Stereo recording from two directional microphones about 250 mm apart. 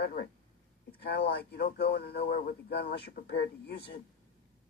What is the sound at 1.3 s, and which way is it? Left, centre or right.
Speech, left.